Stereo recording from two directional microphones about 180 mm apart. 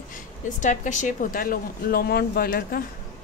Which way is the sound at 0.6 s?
45° left (ahead or behind).